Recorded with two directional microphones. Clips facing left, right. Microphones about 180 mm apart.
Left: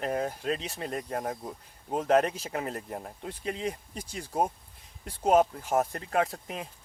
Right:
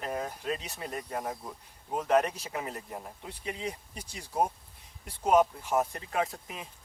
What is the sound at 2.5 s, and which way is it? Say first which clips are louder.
Speech: left 3 dB; 55° left (ahead or behind).